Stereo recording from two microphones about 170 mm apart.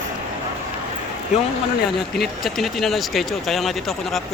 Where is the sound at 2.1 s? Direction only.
Centre (ahead or behind).